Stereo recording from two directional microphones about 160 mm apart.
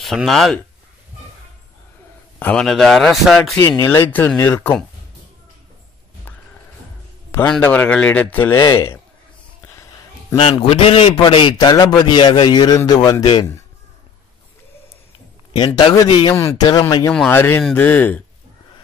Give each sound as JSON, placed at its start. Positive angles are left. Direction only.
{"t": 0.0, "sound": "a man's voice", "side_deg": 0}
{"t": 2.3, "sound": "a man's voice", "side_deg": 10}
{"t": 3.5, "sound": "speech", "side_deg": 20}
{"t": 7.4, "sound": "speech", "side_deg": 5}
{"t": 8.5, "sound": "a man's voice", "side_deg": 25}
{"t": 10.4, "sound": "a man's voice", "side_deg": 40}
{"t": 15.5, "sound": "a man's voice", "side_deg": 30}
{"t": 17.3, "sound": "speech", "side_deg": 15}